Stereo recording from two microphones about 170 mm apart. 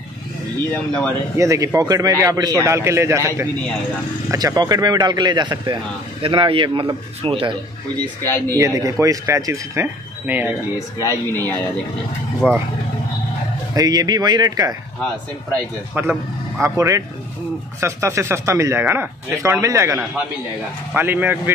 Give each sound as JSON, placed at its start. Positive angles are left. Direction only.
{"t": 1.3, "sound": "speech", "side_deg": -20}
{"t": 8.0, "sound": "speech", "side_deg": 15}
{"t": 8.5, "sound": "speech", "side_deg": -20}
{"t": 11.0, "sound": "speech", "side_deg": 15}
{"t": 12.4, "sound": "speech", "side_deg": -5}
{"t": 13.7, "sound": "speech", "side_deg": -20}
{"t": 15.9, "sound": "speech", "side_deg": -10}